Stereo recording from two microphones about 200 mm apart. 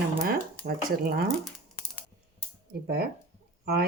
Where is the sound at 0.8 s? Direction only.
50° right (ahead or behind).